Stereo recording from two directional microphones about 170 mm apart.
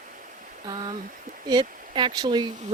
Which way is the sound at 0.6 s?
25° right (ahead or behind).